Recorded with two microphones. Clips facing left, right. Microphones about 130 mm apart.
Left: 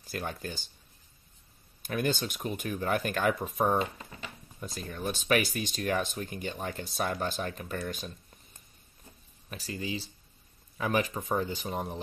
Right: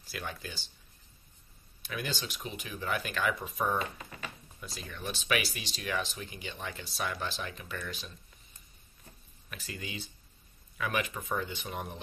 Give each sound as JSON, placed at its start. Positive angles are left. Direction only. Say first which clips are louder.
{"t": 0.0, "sound": "speech", "louder": "left 4 dB", "side_deg": 45}
{"t": 1.8, "sound": "speech", "louder": "left 7 dB", "side_deg": 45}
{"t": 9.5, "sound": "speech", "louder": "left 6 dB", "side_deg": 35}